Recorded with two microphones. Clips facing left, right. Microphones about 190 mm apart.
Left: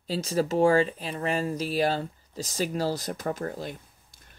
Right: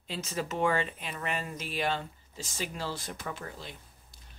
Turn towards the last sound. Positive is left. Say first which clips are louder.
# left 9 dB
turn(degrees=45)  # may be behind; listen again after turning